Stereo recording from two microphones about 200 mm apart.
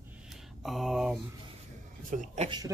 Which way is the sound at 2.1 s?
40° right (ahead or behind).